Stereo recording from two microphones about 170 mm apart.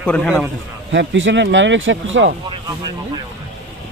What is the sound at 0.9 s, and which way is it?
Speech, 90° right.